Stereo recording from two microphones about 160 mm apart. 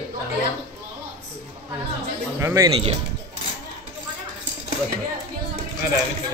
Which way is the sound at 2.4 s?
15° right (ahead or behind).